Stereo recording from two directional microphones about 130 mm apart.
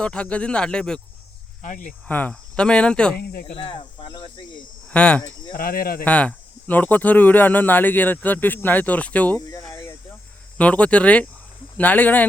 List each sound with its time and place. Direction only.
0.0 s speech: 10° left (ahead or behind)
1.6 s cricket: 80° left
2.0 s speech: 10° left (ahead or behind)
3.5 s speech: 45° left (ahead or behind)
4.9 s speech: 10° left (ahead or behind)
10.6 s speech: 10° left (ahead or behind)